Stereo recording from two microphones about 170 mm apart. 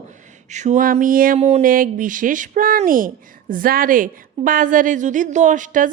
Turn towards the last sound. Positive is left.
turn(degrees=-50)  # may be behind; listen again after turning